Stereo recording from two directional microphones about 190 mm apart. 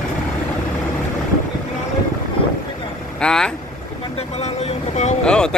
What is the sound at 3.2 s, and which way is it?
Vehicle, 5° left (ahead or behind).